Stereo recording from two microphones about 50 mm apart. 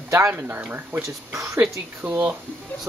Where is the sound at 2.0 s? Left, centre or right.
Right.